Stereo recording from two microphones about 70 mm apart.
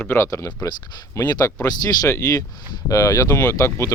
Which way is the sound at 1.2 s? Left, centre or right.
Left.